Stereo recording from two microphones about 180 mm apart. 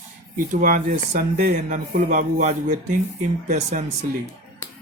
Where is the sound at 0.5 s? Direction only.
50° right (ahead or behind).